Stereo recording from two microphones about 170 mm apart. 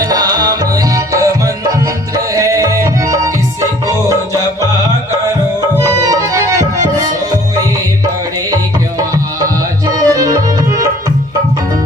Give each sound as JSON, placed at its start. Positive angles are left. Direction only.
{"t": 0.0, "sound": "music", "side_deg": -20}
{"t": 2.1, "sound": "tabla", "side_deg": -20}
{"t": 5.8, "sound": "tabla", "side_deg": -20}
{"t": 9.4, "sound": "tabla", "side_deg": -20}